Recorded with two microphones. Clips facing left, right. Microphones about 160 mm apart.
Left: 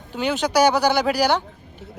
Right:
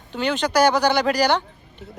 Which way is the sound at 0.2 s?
10° left (ahead or behind).